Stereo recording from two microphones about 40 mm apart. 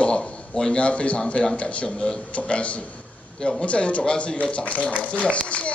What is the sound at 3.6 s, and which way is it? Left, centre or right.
A man's voice, left.